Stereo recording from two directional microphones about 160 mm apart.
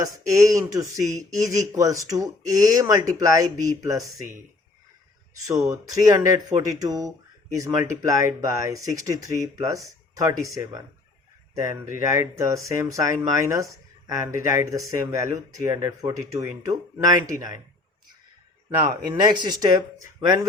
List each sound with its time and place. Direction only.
0.0 s speech: 20° right (ahead or behind)
5.3 s speech: 20° right (ahead or behind)
18.8 s speech: 25° right (ahead or behind)